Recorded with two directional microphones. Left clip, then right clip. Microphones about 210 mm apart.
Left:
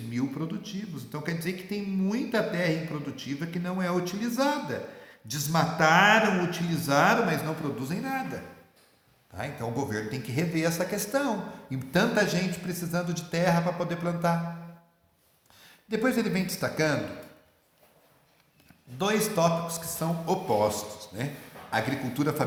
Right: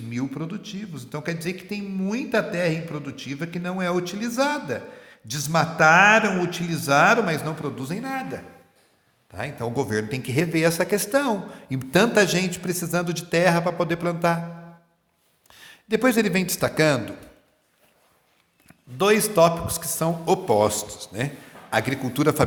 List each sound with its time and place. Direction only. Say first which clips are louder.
0.1 s a man's voice: right 2 dB; 35° right (ahead or behind)
15.4 s speech: right 8 dB; 50° right (ahead or behind)
18.9 s a man's voice: right 8 dB; 50° right (ahead or behind)